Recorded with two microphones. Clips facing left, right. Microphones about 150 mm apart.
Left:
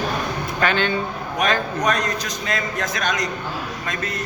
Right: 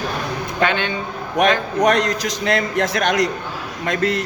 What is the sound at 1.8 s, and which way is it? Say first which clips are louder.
A man's voice: right 7 dB; 70° right (ahead or behind).